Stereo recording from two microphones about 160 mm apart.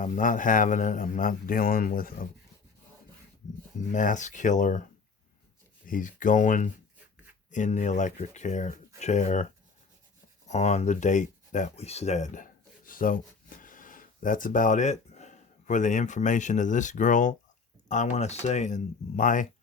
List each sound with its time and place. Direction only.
0.0 s a man's voice: 55° left (ahead or behind)
3.8 s speech: 50° left (ahead or behind)
5.8 s speech: 55° left (ahead or behind)
10.5 s speech: 45° left (ahead or behind)